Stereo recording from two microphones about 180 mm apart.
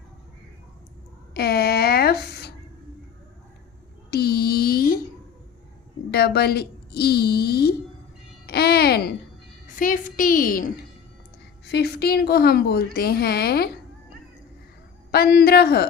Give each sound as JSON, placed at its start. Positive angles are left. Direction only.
{"t": 1.3, "sound": "a sound", "side_deg": 60}
{"t": 4.1, "sound": "a sound", "side_deg": 60}
{"t": 6.1, "sound": "a woman's voice", "side_deg": 65}
{"t": 8.4, "sound": "music", "side_deg": 60}
{"t": 9.7, "sound": "a woman's voice", "side_deg": 45}
{"t": 11.6, "sound": "a woman's voice", "side_deg": 65}
{"t": 15.1, "sound": "a woman's voice", "side_deg": 60}